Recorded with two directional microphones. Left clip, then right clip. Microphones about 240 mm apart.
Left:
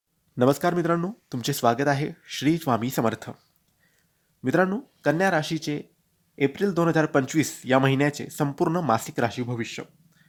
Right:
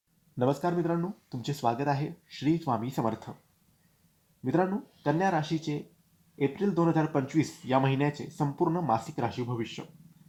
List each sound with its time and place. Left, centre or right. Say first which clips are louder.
0.3 s speech: left 6 dB; left
4.4 s speech: left 5 dB; left